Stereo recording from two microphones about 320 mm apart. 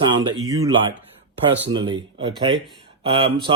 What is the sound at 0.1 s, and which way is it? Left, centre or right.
Speech, centre.